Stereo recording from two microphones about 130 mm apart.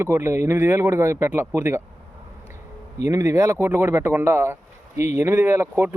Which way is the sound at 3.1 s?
25° right (ahead or behind).